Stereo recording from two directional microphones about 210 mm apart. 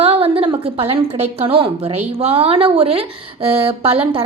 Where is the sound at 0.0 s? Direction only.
30° right (ahead or behind).